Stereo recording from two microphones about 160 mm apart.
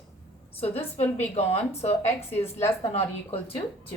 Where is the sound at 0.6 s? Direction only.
40° left (ahead or behind).